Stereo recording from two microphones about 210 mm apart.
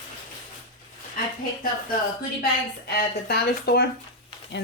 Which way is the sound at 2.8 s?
50° left (ahead or behind).